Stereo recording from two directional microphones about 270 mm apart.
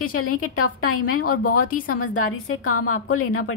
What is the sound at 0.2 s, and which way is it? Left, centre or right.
A woman's voice, left.